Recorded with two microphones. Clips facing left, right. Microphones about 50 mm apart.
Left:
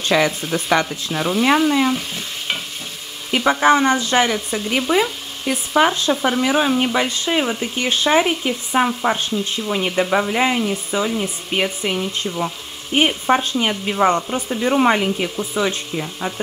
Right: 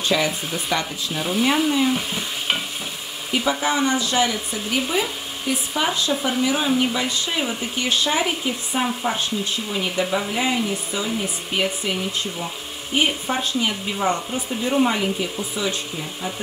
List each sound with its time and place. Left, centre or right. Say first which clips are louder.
0.1 s speech: left 6 dB; left
1.4 s frying: left 3 dB; left
2.0 s stir: right 1 dB; centre
3.3 s speech: left 7 dB; left
12.9 s speech: left 5 dB; left
14.6 s speech: left 4 dB; left
15.5 s speech: left 5 dB; left